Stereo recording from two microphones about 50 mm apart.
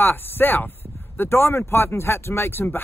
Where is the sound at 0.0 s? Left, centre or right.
Left.